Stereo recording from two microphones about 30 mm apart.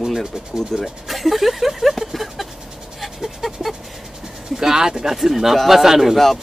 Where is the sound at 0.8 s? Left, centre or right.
Centre.